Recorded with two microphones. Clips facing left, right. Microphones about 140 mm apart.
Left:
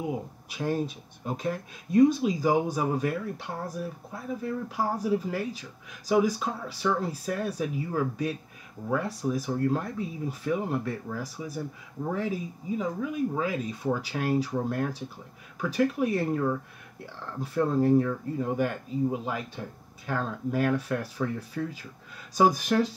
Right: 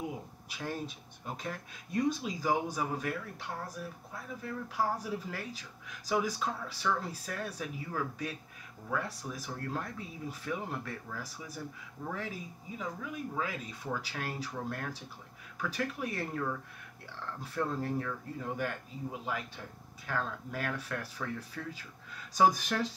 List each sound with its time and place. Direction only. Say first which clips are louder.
0.0 s speech: left 7 dB; 15° left (ahead or behind)